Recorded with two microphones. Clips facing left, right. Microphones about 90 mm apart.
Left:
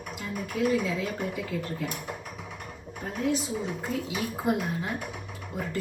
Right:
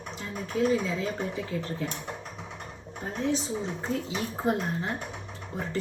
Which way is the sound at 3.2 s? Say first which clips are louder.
Left 1 dB; 5° left (ahead or behind).